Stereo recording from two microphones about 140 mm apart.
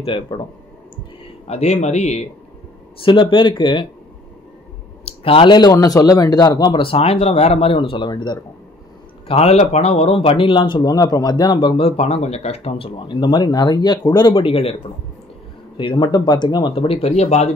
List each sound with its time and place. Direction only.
0.0 s speech: 40° left (ahead or behind)
1.5 s speech: 50° left (ahead or behind)
3.0 s speech: 35° left (ahead or behind)
5.0 s speech: 40° left (ahead or behind)
9.3 s speech: 50° left (ahead or behind)
15.8 s speech: 35° left (ahead or behind); by 17.5 s 50° left (ahead or behind)